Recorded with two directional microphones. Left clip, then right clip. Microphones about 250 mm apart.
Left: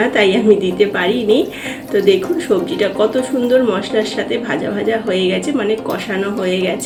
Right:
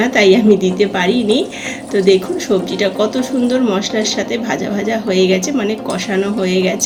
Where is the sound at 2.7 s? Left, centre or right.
Right.